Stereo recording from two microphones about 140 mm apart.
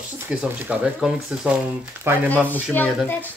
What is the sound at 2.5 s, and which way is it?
Speech, 10° left (ahead or behind).